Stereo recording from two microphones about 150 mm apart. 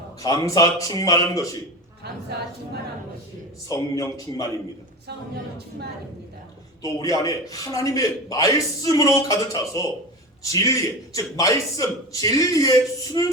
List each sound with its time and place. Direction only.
0.2 s a man's voice: 25° left (ahead or behind)
3.7 s a man's voice: 25° left (ahead or behind)
6.8 s a man's voice: 20° left (ahead or behind)